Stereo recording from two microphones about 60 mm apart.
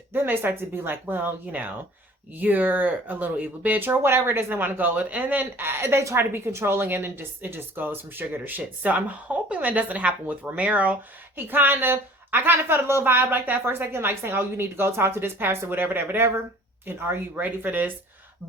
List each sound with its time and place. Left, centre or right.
0.1 s a woman's voice: right
4.0 s a woman's voice: right
6.8 s a woman's voice: right